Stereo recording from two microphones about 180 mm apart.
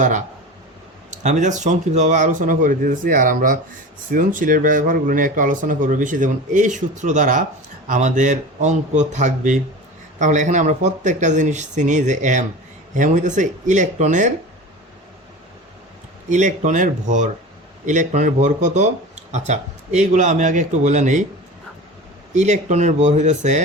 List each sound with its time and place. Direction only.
1.1 s speech: 40° right (ahead or behind)
16.3 s speech: 40° right (ahead or behind)
22.4 s speech: 40° right (ahead or behind)